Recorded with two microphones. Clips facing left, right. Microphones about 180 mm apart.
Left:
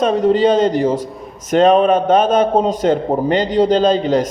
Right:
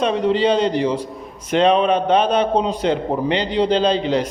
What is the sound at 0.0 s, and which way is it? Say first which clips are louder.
A man's voice: left 4 dB; 45° left (ahead or behind).